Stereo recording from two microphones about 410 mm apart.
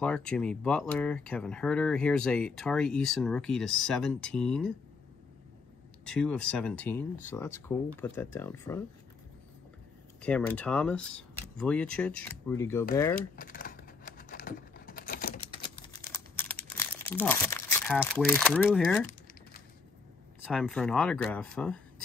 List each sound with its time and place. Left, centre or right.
0.0 s speech: centre
6.0 s speech: centre
10.2 s speech: centre
13.4 s a sound: left
16.0 s crumpling: centre
20.4 s speech: centre